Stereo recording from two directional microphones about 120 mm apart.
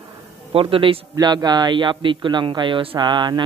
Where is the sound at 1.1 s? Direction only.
35° right (ahead or behind).